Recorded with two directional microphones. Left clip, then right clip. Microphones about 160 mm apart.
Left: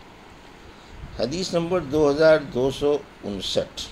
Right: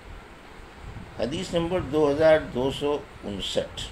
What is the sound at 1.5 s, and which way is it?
Speech, 40° left (ahead or behind).